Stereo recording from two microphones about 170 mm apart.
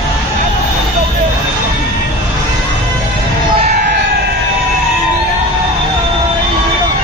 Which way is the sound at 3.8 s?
80° right.